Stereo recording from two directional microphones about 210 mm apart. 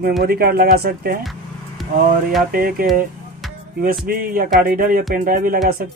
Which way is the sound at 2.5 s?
45° right (ahead or behind).